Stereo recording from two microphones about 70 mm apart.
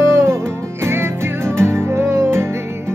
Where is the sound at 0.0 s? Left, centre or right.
Right.